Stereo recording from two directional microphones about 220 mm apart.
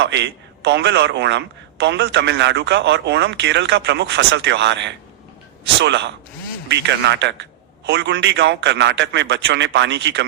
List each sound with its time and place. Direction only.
0.0 s a man's voice: 50° right (ahead or behind)